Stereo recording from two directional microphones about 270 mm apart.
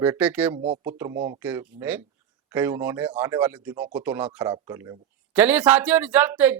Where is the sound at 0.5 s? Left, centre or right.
Right.